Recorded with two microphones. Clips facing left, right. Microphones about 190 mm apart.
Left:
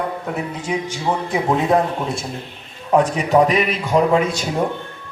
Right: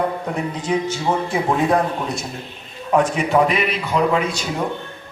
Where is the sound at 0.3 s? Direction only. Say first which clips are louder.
Right 3 dB; 10° left (ahead or behind); by 2.2 s 25° left (ahead or behind).